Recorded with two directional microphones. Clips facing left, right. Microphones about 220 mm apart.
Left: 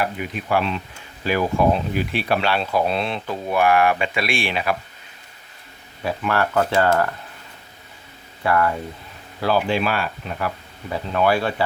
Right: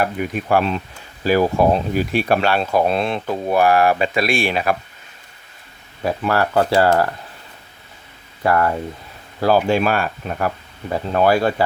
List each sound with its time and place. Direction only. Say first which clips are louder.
0.0 s speech: right 4 dB; 45° right (ahead or behind)
6.0 s speech: right 3 dB; 40° right (ahead or behind)
8.4 s speech: right 2 dB; 40° right (ahead or behind)